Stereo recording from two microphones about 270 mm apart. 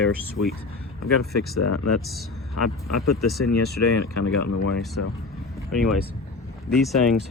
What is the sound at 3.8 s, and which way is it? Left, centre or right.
Speech, left.